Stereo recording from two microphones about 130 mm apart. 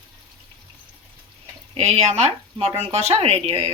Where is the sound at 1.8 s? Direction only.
55° right (ahead or behind).